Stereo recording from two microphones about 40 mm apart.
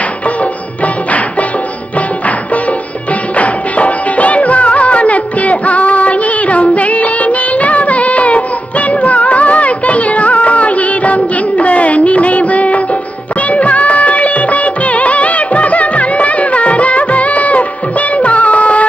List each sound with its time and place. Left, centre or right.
2.0 s music: left
13.5 s music of bollywood: left